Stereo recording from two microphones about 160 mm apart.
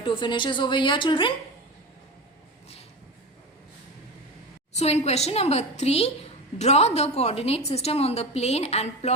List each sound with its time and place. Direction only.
0.0 s a woman's voice: 30° left (ahead or behind)
4.7 s a woman's voice: 45° left (ahead or behind)